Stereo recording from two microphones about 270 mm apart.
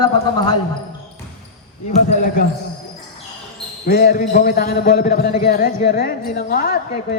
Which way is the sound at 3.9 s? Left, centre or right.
Left.